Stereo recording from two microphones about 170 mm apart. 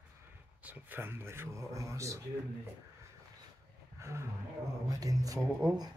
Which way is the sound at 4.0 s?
15° right (ahead or behind).